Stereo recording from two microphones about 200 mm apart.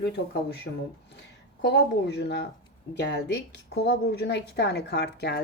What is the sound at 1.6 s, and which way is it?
Speech, 55° left (ahead or behind).